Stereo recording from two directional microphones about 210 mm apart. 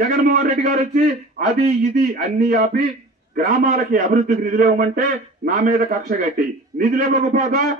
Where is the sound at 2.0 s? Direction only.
45° right (ahead or behind).